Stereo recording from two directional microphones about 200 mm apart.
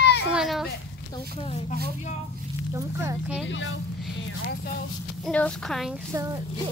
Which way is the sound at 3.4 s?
70° left (ahead or behind).